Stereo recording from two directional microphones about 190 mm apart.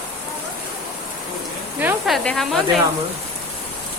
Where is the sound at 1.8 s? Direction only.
5° right (ahead or behind).